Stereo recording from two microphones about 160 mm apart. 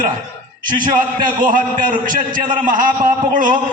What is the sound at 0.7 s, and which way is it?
A man's voice, 60° right (ahead or behind).